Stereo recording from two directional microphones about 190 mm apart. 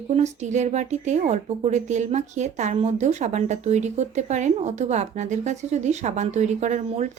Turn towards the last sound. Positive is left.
turn(degrees=-40)  # may be behind; listen again after turning